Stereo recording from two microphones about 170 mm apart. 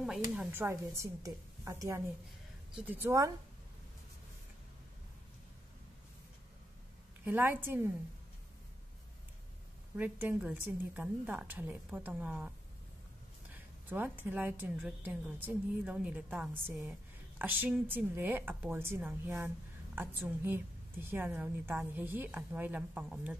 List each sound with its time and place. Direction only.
0.0 s a woman's voice: 5° right (ahead or behind)
7.2 s a woman's voice: 10° right (ahead or behind)
9.9 s a woman's voice: 10° right (ahead or behind)
13.8 s a woman's voice: 10° right (ahead or behind)